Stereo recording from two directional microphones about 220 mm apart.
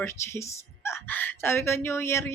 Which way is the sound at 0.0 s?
10° left (ahead or behind).